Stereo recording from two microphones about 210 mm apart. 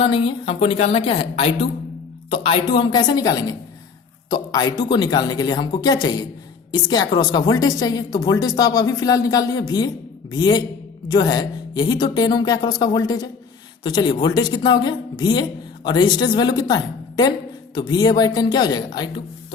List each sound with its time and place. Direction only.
0.0 s a woman's voice: 25° left (ahead or behind)